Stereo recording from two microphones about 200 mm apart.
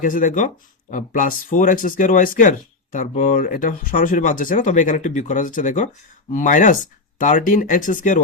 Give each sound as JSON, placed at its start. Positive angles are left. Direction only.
{"t": 0.0, "sound": "speech", "side_deg": 40}